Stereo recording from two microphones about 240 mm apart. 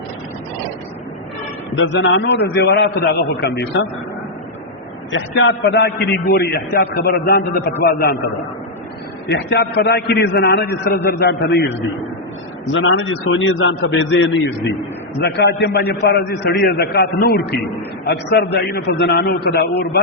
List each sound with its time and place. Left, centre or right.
1.7 s a man's voice: left
5.1 s a man's voice: left
9.2 s a man's voice: left